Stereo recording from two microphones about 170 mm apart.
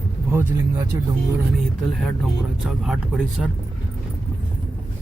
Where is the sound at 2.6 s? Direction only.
Centre (ahead or behind).